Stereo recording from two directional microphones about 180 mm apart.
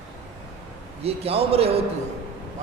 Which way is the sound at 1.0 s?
35° right (ahead or behind).